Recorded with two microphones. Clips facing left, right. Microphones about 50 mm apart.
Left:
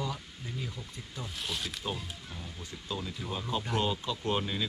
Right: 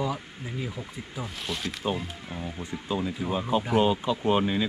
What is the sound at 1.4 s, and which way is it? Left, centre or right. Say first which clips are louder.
Speech: right 3 dB; centre.